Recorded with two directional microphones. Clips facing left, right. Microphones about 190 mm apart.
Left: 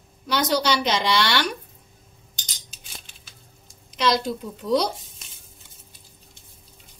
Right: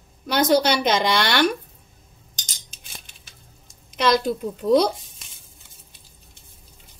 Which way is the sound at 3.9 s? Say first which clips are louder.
Right 3 dB; 55° right (ahead or behind).